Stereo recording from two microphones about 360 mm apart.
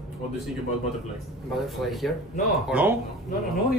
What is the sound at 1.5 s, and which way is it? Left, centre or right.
Speech, centre.